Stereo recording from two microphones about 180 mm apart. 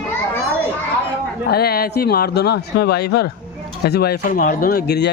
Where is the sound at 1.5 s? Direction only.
60° left (ahead or behind).